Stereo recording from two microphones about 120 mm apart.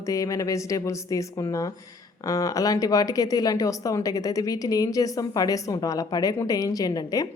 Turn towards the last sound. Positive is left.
turn(degrees=30)  # may be behind; listen again after turning